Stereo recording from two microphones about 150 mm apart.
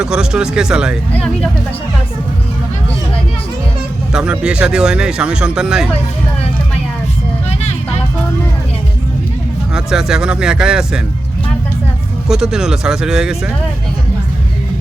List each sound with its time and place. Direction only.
0.0 s speech: 5° right (ahead or behind)
1.1 s speech: 5° left (ahead or behind)
4.1 s speech: 5° right (ahead or behind)
9.7 s speech: 5° right (ahead or behind)
12.3 s speech: 5° right (ahead or behind)